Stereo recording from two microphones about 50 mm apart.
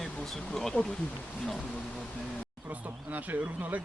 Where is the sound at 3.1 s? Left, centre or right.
Right.